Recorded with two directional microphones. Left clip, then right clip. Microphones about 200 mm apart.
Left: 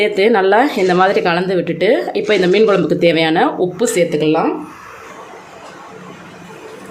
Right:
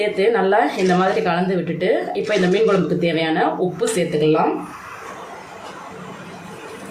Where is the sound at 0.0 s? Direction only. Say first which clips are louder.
Left 5 dB; 50° left (ahead or behind).